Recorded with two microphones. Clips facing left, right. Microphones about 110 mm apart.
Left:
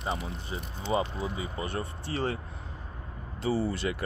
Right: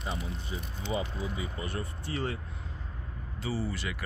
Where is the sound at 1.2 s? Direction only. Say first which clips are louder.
Left 3 dB; 30° left (ahead or behind).